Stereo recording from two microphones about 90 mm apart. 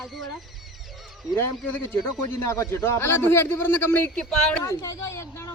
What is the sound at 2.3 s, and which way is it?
A man's voice, 30° left (ahead or behind).